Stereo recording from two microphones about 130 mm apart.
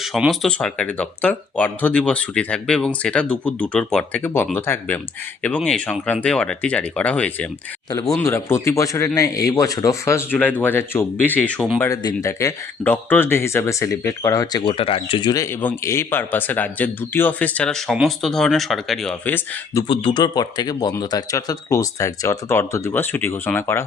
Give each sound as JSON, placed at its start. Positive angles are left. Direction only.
{"t": 0.0, "sound": "speech", "side_deg": 0}
{"t": 8.2, "sound": "speech", "side_deg": 20}
{"t": 11.8, "sound": "speech", "side_deg": 25}
{"t": 15.6, "sound": "speech", "side_deg": 20}
{"t": 19.9, "sound": "speech", "side_deg": 40}